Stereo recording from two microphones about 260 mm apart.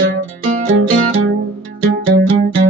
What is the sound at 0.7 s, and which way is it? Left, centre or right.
Music, right.